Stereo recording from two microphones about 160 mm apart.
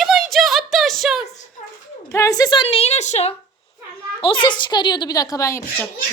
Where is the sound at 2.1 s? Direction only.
20° left (ahead or behind); by 3.3 s 45° left (ahead or behind).